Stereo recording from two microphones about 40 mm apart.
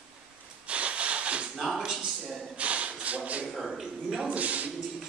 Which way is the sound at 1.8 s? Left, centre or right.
Centre.